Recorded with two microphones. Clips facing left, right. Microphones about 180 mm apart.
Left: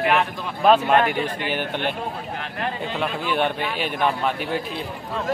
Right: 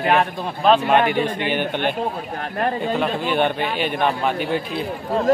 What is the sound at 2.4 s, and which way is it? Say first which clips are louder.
Speech: right 7 dB; 45° right (ahead or behind).